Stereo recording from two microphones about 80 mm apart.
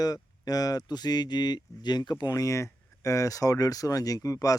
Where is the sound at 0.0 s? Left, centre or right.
Left.